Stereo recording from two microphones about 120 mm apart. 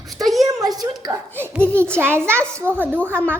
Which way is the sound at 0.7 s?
30° right (ahead or behind).